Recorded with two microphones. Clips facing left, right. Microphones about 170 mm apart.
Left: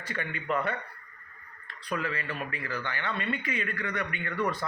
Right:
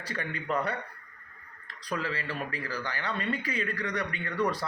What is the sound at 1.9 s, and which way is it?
Speech, 35° right (ahead or behind).